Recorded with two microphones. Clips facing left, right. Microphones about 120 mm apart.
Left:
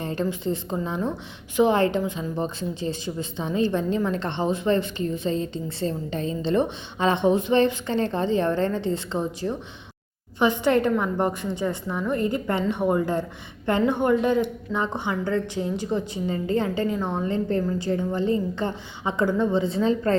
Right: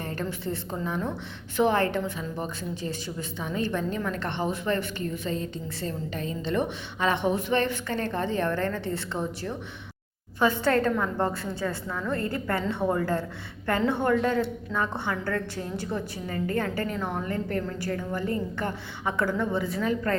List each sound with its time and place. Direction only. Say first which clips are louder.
0.0 s a woman's voice: left 5 dB; 20° left (ahead or behind)